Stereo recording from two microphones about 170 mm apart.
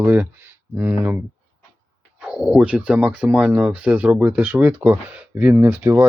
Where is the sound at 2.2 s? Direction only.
5° right (ahead or behind).